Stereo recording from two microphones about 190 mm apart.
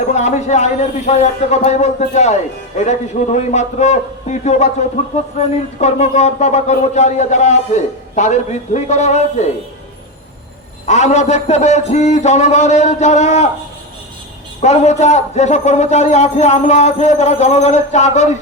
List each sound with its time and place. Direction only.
0.1 s speech: 35° left (ahead or behind)
10.8 s speech: 35° left (ahead or behind)
14.6 s speech: 35° left (ahead or behind)